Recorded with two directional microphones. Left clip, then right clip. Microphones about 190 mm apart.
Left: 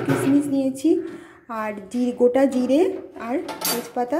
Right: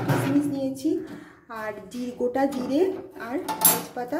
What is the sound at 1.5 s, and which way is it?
A woman's voice, 30° left (ahead or behind).